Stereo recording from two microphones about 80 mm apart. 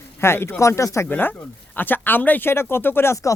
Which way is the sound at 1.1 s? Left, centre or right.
Left.